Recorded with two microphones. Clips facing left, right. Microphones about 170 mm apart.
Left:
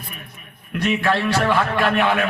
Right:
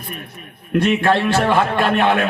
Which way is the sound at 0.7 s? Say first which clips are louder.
Right 5 dB; 25° right (ahead or behind).